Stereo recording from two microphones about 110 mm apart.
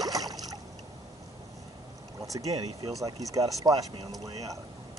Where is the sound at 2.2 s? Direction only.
30° right (ahead or behind).